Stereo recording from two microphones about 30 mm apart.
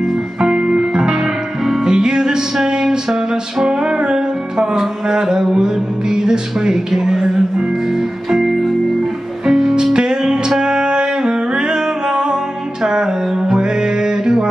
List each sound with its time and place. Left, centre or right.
0.4 s music: right
9.5 s music: centre